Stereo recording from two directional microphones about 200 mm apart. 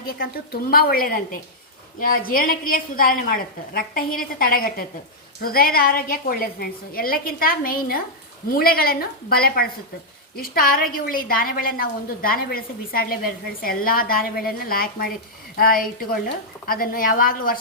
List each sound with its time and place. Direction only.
0.0 s a woman's voice: 50° left (ahead or behind)